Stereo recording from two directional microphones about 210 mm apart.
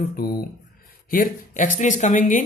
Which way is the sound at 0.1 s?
45° left (ahead or behind).